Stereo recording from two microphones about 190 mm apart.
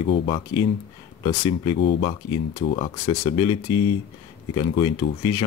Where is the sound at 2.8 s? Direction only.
30° left (ahead or behind).